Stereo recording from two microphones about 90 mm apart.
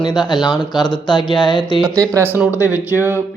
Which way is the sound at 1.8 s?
35° right (ahead or behind).